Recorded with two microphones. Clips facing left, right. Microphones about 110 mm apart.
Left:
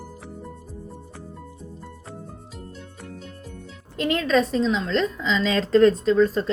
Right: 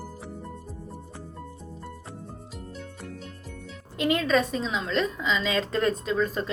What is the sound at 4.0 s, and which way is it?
A woman's voice, 5° right (ahead or behind).